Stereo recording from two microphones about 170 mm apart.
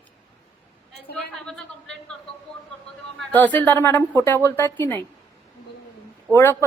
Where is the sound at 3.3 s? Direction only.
10° left (ahead or behind).